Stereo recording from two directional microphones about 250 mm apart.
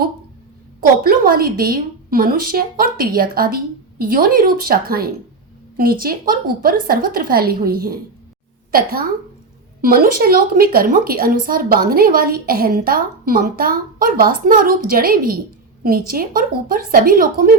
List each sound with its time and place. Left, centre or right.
0.8 s a woman's voice: right